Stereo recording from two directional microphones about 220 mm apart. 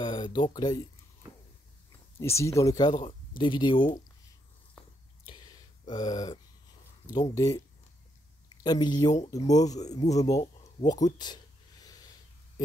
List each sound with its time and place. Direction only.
0.0 s speech: 20° left (ahead or behind)
2.1 s speech: 10° left (ahead or behind)
5.2 s a sound: 20° left (ahead or behind)
7.1 s speech: 15° left (ahead or behind)
8.6 s speech: 20° left (ahead or behind)
10.6 s a sound: 20° left (ahead or behind)